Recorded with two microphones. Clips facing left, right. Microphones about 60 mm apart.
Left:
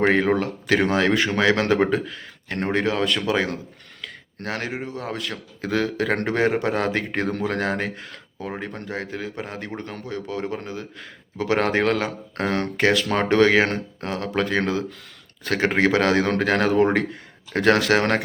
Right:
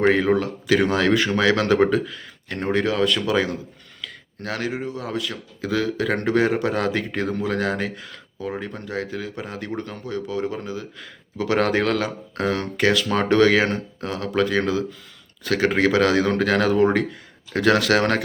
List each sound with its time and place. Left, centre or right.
0.0 s speech: left
0.9 s speech: left
4.4 s speech: left